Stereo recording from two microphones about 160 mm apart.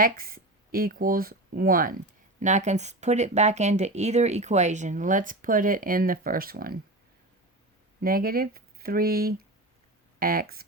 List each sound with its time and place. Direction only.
0.0 s speech: 65° right (ahead or behind)
2.4 s speech: 50° right (ahead or behind); by 6.7 s 65° right (ahead or behind)
8.0 s speech: 65° right (ahead or behind)